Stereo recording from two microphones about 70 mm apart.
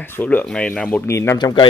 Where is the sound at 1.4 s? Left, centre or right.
Left.